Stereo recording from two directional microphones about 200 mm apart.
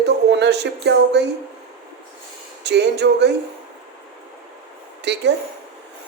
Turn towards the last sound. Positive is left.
turn(degrees=-60)  # may be behind; listen again after turning